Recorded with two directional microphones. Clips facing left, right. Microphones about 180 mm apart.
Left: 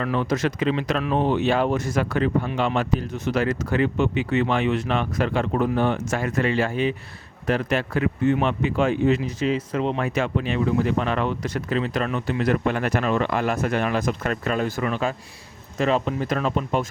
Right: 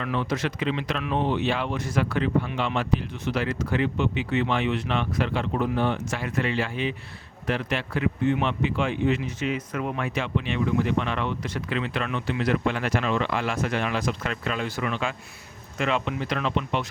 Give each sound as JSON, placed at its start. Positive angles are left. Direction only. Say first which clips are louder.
{"t": 0.0, "sound": "speech", "louder": "left 4 dB", "side_deg": 40}
{"t": 10.1, "sound": "speech", "louder": "left 4 dB", "side_deg": 45}